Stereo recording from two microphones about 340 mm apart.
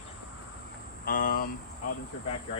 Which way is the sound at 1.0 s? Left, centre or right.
Left.